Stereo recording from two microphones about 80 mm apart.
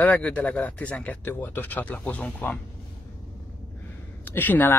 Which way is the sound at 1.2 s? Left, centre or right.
Left.